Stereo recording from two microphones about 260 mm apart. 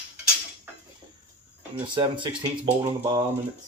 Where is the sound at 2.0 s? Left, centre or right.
Centre.